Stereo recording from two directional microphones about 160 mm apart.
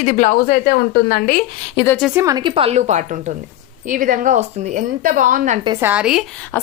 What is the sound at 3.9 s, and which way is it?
A woman's voice, 55° right (ahead or behind).